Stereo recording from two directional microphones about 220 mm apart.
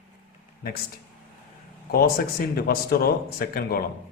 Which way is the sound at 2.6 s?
45° left (ahead or behind).